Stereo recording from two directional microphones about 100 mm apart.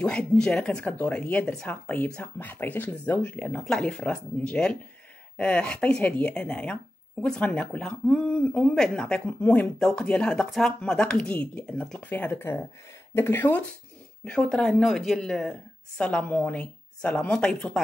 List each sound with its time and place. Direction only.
0.0 s speech: 10° left (ahead or behind)